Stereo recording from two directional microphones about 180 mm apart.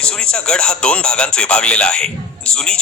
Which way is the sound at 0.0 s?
5° left (ahead or behind).